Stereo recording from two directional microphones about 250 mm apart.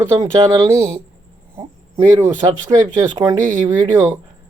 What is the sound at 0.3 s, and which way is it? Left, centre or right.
Speech, centre.